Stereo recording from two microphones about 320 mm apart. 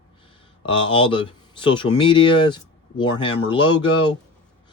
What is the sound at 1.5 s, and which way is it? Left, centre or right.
A man's voice, centre.